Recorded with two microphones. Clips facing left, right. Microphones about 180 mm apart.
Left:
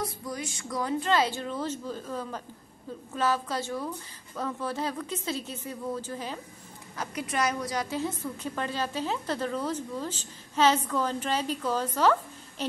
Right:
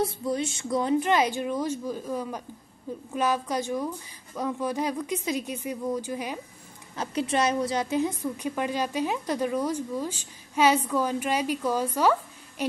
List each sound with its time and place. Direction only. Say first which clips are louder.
0.0 s a woman's voice: right 7 dB; 25° right (ahead or behind)
7.0 s a woman's voice: right 4 dB; 25° right (ahead or behind); by 12.6 s 10° right (ahead or behind)